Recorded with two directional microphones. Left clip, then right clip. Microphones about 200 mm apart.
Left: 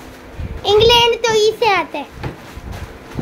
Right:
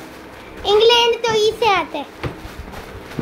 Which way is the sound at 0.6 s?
15° left (ahead or behind).